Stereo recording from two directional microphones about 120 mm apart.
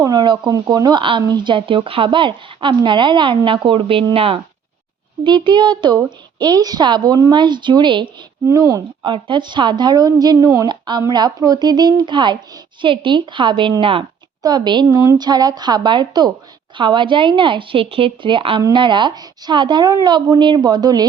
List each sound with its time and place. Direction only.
0.0 s a woman's voice: 35° right (ahead or behind)
5.2 s a woman's voice: 40° right (ahead or behind)
8.4 s a woman's voice: 25° right (ahead or behind)
9.0 s a woman's voice: 45° right (ahead or behind)